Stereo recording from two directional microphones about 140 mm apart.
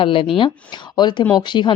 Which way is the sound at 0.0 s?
40° left (ahead or behind).